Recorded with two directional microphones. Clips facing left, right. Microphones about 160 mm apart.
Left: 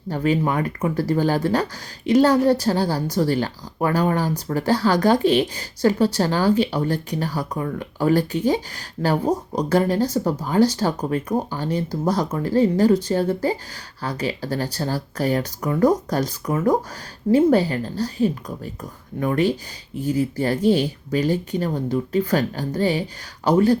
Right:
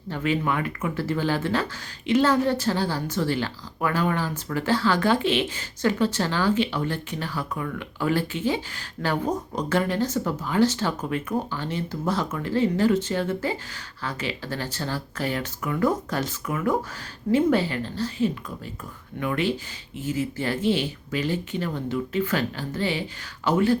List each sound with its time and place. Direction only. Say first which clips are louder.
0.1 s speech: left 4 dB; 40° left (ahead or behind)